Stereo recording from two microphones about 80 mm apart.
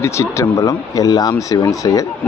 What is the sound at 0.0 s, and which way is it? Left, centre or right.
Speech, left.